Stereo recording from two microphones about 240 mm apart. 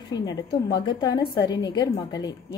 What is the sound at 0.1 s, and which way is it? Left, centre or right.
A woman's voice, centre.